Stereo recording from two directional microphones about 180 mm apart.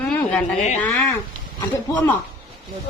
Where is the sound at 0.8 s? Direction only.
10° left (ahead or behind).